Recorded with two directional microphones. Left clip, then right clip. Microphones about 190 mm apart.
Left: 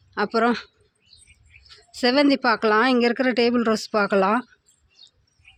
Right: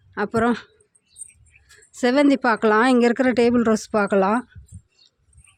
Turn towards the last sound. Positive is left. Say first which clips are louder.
# right 1 dB
turn(degrees=-20)  # may be behind; listen again after turning